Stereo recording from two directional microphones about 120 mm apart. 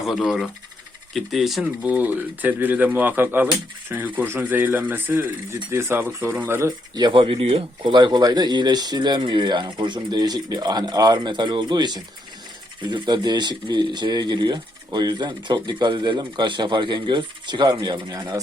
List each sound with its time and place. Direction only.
0.0 s speech: centre (ahead or behind)
1.8 s speech: 10° right (ahead or behind)
6.7 s speech: 35° right (ahead or behind); by 7.9 s 55° right (ahead or behind)
7.9 s speech: 40° right (ahead or behind)